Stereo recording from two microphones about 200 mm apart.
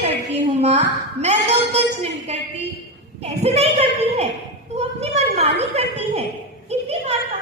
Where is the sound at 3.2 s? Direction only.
30° right (ahead or behind).